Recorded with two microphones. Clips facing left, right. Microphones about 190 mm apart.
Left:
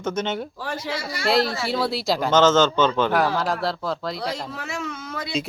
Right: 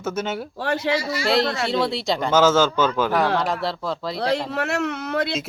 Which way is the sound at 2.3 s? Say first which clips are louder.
Even; 10° right (ahead or behind).